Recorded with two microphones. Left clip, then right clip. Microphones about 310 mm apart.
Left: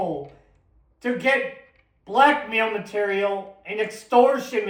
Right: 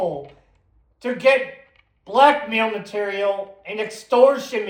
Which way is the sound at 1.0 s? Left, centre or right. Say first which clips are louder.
Right 4 dB; right.